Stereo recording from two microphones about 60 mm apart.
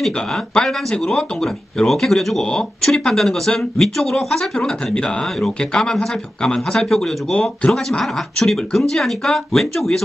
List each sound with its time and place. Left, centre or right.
0.6 s speech: centre